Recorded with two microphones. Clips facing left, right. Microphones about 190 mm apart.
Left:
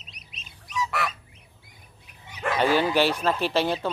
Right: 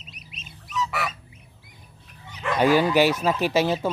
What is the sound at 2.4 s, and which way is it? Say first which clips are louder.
Bow-wow: even; 45° left (ahead or behind).